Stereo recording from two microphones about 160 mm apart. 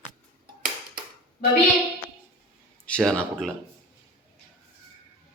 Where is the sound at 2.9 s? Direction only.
5° left (ahead or behind).